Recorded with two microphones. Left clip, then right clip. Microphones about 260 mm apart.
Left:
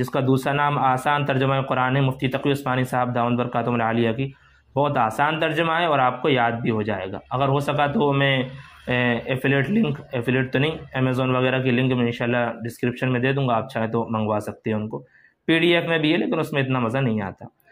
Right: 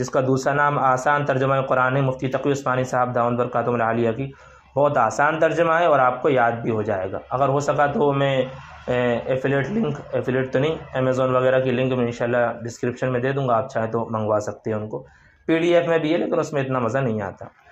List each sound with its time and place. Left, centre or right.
0.3 s a man's voice: left